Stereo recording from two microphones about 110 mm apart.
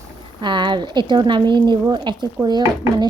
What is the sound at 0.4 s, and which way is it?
A woman's voice, 45° right (ahead or behind).